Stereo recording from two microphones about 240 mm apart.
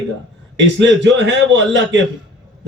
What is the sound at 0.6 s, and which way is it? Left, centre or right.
Speech, right.